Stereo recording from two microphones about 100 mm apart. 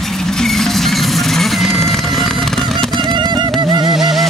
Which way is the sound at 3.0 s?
50° right (ahead or behind).